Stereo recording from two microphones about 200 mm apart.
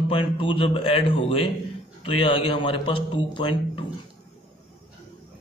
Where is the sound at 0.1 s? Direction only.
25° left (ahead or behind).